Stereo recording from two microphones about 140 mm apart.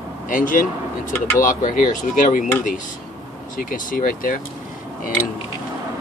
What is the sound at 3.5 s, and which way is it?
Speech, 75° left (ahead or behind).